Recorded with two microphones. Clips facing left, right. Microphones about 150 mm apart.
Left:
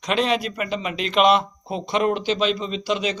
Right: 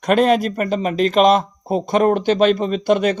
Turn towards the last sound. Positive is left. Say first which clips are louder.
# right 8 dB
turn(degrees=-55)  # may be behind; listen again after turning